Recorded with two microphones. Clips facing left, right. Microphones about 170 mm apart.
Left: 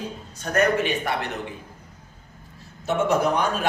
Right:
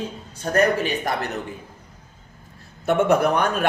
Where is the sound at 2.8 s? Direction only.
60° right (ahead or behind).